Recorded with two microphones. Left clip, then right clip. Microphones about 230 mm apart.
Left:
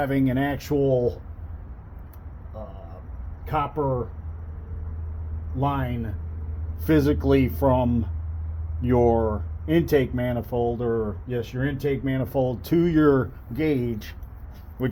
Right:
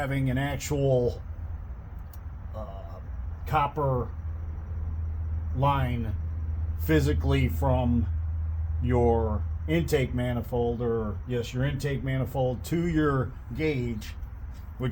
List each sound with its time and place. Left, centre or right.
0.0 s speech: left
3.5 s speech: centre
5.5 s speech: left
6.8 s speech: left